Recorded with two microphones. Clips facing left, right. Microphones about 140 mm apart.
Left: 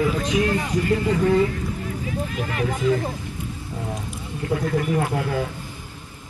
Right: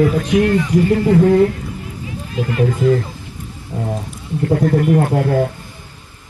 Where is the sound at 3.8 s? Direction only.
35° right (ahead or behind).